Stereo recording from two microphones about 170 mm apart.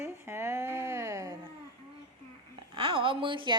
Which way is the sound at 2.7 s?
30° right (ahead or behind).